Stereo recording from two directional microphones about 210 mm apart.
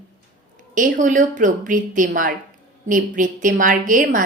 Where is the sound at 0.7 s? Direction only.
40° right (ahead or behind).